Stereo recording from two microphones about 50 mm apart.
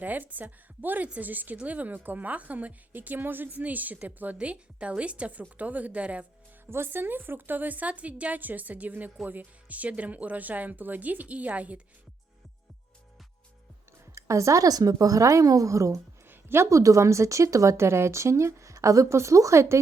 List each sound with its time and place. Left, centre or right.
0.0 s a woman's voice: right
6.7 s speech: right
14.2 s a woman's voice: right
16.2 s a sound: right
16.6 s speech: right